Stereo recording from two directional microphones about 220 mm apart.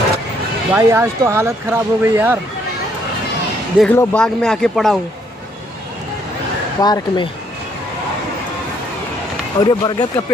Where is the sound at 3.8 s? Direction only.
5° left (ahead or behind).